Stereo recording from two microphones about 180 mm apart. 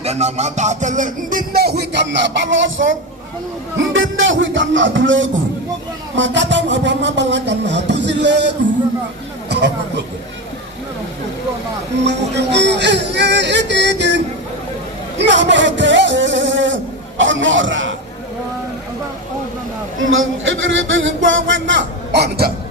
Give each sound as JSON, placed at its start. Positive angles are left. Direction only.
{"t": 0.0, "sound": "music", "side_deg": -35}
{"t": 3.8, "sound": "speech", "side_deg": -90}
{"t": 6.1, "sound": "a sound", "side_deg": -90}
{"t": 9.5, "sound": "speech", "side_deg": -75}
{"t": 12.0, "sound": "music", "side_deg": -75}
{"t": 15.2, "sound": "speech", "side_deg": -85}
{"t": 20.0, "sound": "speech", "side_deg": -90}